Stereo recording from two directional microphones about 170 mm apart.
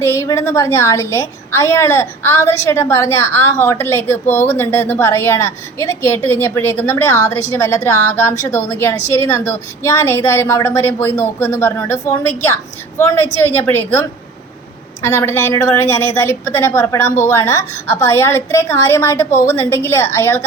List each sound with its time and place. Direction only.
0.0 s a woman's voice: 15° left (ahead or behind)